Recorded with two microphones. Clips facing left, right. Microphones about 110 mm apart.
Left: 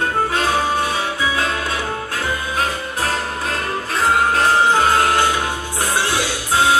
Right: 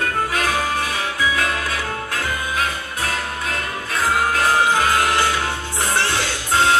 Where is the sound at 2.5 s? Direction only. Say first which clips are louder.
Left 3 dB; 40° left (ahead or behind).